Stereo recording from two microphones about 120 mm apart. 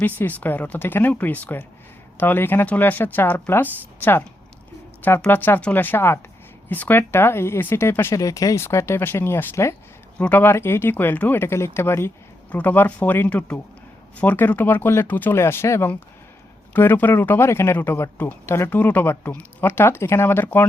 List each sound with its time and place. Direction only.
0.0 s speech: 15° left (ahead or behind)